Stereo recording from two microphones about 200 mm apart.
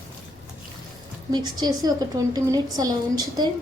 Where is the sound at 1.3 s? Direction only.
20° right (ahead or behind).